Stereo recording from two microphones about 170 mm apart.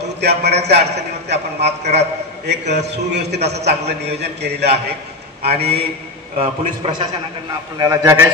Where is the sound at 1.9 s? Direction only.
75° right (ahead or behind).